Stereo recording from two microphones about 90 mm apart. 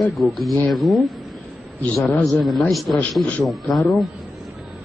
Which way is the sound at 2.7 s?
Centre (ahead or behind).